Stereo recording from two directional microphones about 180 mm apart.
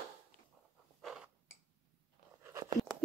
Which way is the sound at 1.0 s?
Centre (ahead or behind).